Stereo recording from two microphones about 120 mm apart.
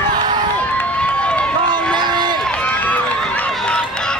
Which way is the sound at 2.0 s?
40° right (ahead or behind).